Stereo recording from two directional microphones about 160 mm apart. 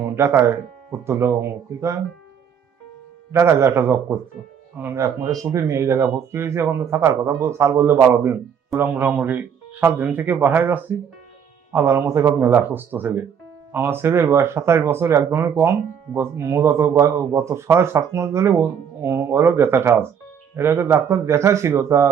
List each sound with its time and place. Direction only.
0.0 s speech: 15° right (ahead or behind)
3.3 s speech: 15° right (ahead or behind)